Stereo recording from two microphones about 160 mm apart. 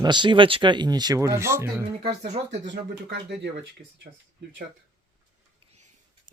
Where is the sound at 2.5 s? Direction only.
90° right.